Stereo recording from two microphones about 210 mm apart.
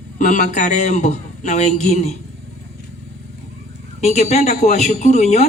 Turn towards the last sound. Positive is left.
turn(degrees=30)  # may be behind; listen again after turning